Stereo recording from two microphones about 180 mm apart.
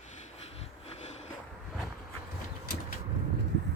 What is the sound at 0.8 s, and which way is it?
Sniff, 35° left (ahead or behind).